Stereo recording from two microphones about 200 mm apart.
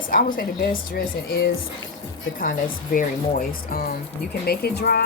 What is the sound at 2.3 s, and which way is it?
Speech, 45° left (ahead or behind).